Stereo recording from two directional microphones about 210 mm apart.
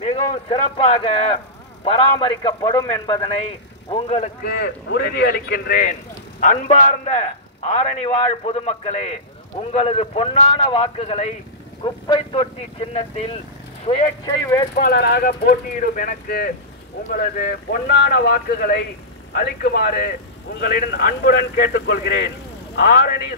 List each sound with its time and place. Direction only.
0.0 s a man's voice: 25° left (ahead or behind)
3.9 s a man's voice: 30° left (ahead or behind)
4.5 s a man's voice: 50° left (ahead or behind); by 14.3 s 25° left (ahead or behind)
14.4 s speech: 15° left (ahead or behind)
14.8 s a man's voice: 45° left (ahead or behind)